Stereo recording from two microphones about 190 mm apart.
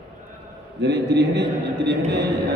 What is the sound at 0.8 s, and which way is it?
A man's voice, 65° right (ahead or behind).